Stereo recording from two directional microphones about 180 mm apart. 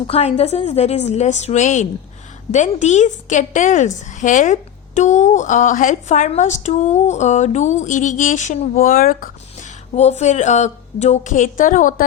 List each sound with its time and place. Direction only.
0.1 s a woman's voice: 35° left (ahead or behind)